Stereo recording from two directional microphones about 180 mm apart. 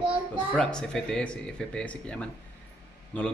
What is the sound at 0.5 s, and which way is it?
A man's voice, 5° left (ahead or behind).